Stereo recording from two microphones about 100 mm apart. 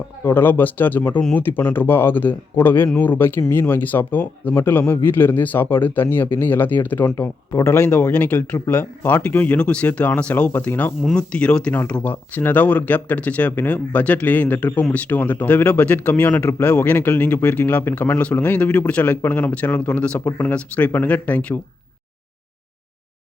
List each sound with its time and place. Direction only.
0.3 s speech: 20° left (ahead or behind)